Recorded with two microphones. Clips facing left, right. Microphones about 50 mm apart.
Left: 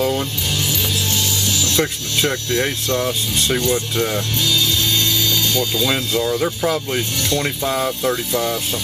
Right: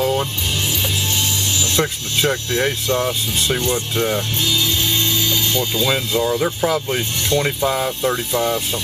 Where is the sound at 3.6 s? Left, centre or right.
Right.